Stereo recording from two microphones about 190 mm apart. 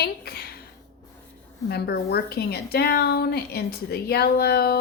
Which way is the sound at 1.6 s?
60° left (ahead or behind).